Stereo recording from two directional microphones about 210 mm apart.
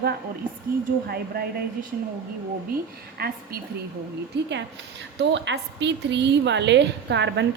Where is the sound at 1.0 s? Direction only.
45° right (ahead or behind).